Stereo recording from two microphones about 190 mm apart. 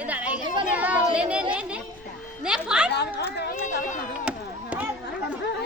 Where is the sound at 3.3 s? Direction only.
60° left (ahead or behind).